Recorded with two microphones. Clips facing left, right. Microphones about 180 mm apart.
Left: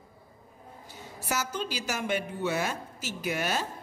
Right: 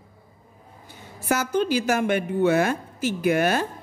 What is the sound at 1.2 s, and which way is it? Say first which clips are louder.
A woman's voice: right 10 dB; 55° right (ahead or behind).